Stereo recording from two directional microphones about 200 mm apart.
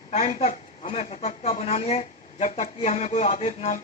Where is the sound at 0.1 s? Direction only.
35° left (ahead or behind).